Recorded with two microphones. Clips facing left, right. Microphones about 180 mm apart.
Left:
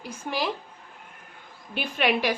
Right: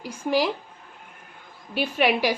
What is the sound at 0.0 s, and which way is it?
Speech, 10° right (ahead or behind).